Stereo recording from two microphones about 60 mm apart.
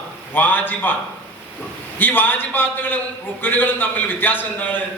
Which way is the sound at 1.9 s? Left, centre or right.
Left.